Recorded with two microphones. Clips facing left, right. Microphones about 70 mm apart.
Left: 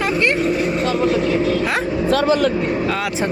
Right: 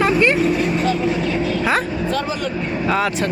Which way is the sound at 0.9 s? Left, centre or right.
Left.